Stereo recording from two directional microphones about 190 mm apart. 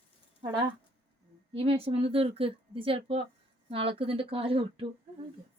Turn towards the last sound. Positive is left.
turn(degrees=-30)  # may be behind; listen again after turning